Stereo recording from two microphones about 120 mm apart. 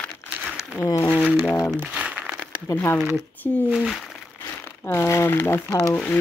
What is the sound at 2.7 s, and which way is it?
Speech, 20° left (ahead or behind).